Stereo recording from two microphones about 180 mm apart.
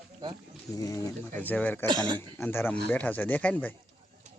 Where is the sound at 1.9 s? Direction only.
25° right (ahead or behind).